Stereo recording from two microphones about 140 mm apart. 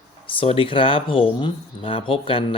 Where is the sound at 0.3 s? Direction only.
40° left (ahead or behind).